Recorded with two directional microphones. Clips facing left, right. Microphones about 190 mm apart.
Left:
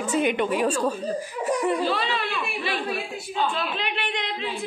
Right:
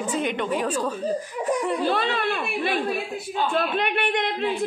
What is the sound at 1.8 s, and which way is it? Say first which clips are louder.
A woman's voice: right 3 dB; 55° right (ahead or behind).